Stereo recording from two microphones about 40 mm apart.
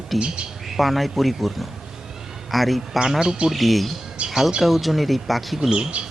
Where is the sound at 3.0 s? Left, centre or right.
Centre.